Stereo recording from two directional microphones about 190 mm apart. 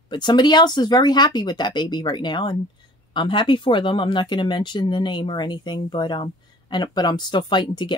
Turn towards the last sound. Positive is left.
turn(degrees=25)  # may be behind; listen again after turning